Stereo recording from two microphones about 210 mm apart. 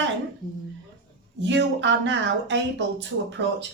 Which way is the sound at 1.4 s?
60° right (ahead or behind).